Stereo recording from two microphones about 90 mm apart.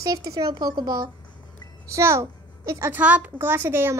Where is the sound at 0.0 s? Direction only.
40° right (ahead or behind).